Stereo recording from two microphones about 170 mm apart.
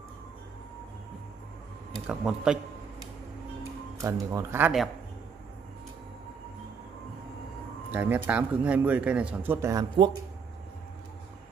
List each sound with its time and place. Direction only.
1.9 s speech: centre (ahead or behind)
4.0 s speech: 20° right (ahead or behind)
7.9 s speech: 10° right (ahead or behind)